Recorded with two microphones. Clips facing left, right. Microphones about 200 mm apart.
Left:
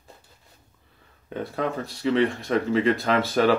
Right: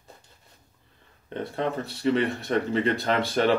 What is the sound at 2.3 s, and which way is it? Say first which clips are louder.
Speech: left 2 dB; centre (ahead or behind).